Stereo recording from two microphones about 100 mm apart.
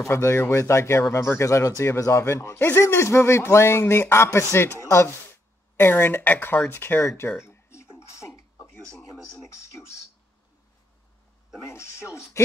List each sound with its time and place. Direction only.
0.1 s a man's voice: 25° left (ahead or behind)
7.2 s a sound: 25° left (ahead or behind)
9.7 s speech: 30° left (ahead or behind)
11.7 s a man's voice: 30° left (ahead or behind)